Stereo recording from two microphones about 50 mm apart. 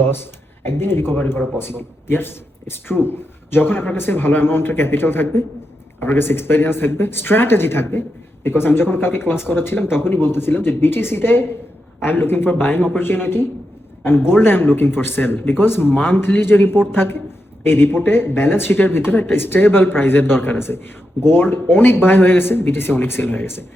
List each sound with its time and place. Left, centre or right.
0.0 s speech: left